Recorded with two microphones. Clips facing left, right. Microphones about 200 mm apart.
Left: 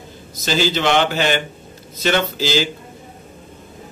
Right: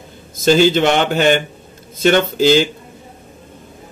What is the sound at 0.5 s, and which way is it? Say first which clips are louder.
Speech: right 6 dB; 50° right (ahead or behind).